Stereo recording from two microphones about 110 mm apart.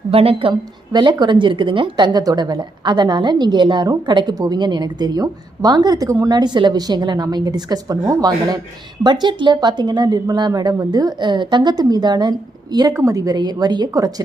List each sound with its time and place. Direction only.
0.1 s a woman's voice: 60° right (ahead or behind)
0.9 s a woman's voice: 45° right (ahead or behind)
12.9 s a woman's voice: 30° right (ahead or behind)